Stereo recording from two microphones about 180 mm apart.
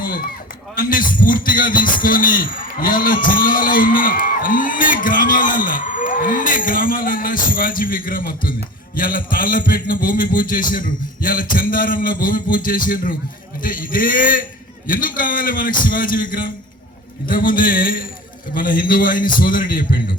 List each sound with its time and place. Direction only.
0.8 s a man's voice: 50° left (ahead or behind)
17.2 s a man's voice: 50° left (ahead or behind)